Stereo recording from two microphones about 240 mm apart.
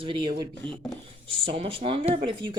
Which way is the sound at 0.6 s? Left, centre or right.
Centre.